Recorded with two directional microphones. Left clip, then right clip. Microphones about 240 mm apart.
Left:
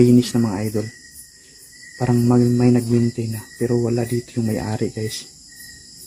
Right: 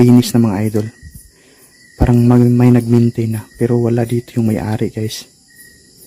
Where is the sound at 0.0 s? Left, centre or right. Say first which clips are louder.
Right 4 dB; right.